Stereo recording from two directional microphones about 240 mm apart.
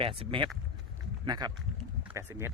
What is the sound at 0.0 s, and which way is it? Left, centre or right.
Speech, right.